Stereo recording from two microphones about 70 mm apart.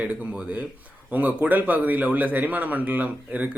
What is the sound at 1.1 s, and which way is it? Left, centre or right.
Speech, right.